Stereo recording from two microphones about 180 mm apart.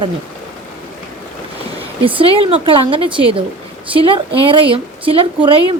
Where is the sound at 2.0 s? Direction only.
30° right (ahead or behind).